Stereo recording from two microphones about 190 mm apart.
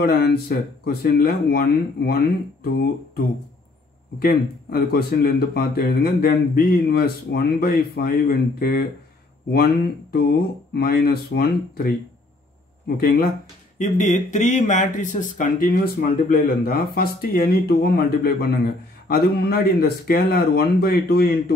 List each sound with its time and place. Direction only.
0.0 s speech: 55° left (ahead or behind)
10.7 s speech: 55° left (ahead or behind)
13.7 s speech: 40° left (ahead or behind)